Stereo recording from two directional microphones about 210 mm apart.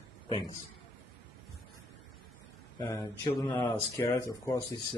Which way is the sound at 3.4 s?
10° left (ahead or behind).